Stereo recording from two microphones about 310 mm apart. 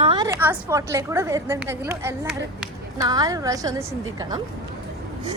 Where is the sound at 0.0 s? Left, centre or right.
Centre.